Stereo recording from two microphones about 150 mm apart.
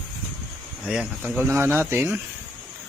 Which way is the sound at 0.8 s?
5° right (ahead or behind).